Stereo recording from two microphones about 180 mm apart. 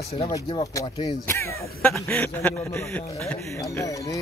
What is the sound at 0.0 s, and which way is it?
Speech, 35° left (ahead or behind).